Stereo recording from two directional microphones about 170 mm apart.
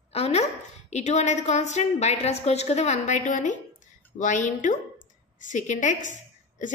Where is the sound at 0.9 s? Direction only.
40° left (ahead or behind).